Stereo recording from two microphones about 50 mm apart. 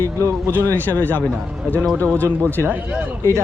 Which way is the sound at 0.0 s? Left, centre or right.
Right.